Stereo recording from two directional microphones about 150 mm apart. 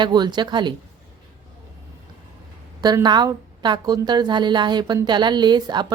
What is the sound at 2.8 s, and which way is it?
A woman's voice, 25° right (ahead or behind).